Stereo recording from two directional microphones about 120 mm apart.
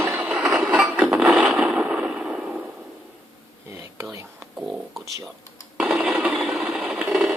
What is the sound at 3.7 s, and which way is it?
Whispering, 25° right (ahead or behind).